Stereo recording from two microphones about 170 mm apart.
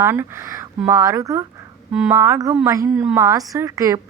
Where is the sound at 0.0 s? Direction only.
15° right (ahead or behind).